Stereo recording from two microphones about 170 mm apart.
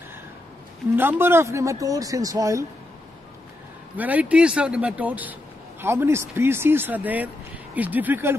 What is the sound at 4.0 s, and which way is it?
Speech, 10° right (ahead or behind).